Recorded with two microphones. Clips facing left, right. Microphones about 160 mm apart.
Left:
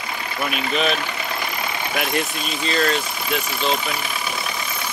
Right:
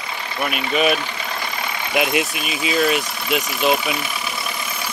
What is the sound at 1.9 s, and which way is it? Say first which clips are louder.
Speech: right 5 dB; 20° right (ahead or behind).